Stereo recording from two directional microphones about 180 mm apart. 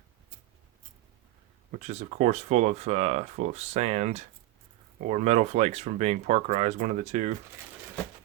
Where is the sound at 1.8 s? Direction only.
40° right (ahead or behind).